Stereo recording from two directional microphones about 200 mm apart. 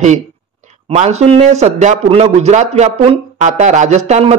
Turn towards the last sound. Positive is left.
turn(degrees=-30)  # may be behind; listen again after turning